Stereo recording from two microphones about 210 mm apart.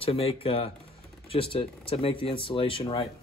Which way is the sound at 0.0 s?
25° left (ahead or behind).